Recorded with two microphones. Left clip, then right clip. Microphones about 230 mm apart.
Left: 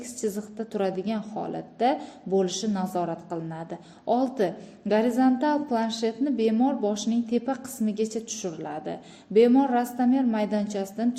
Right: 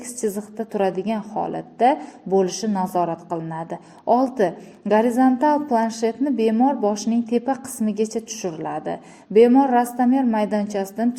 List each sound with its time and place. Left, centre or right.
0.2 s a woman's voice: centre